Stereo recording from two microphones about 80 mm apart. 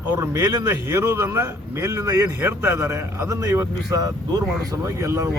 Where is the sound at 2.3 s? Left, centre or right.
Right.